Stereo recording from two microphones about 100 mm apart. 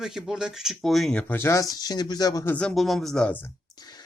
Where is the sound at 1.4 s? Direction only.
30° left (ahead or behind).